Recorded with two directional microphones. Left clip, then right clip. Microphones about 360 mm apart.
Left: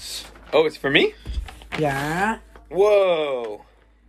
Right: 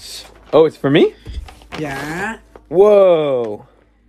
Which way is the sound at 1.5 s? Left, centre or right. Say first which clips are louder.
Left 1 dB; centre.